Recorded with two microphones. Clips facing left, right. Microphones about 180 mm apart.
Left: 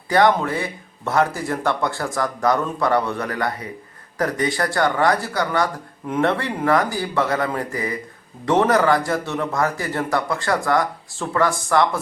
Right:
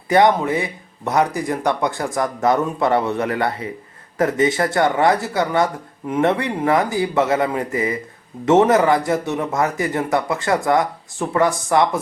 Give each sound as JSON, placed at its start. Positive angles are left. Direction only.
{"t": 0.1, "sound": "speech", "side_deg": -20}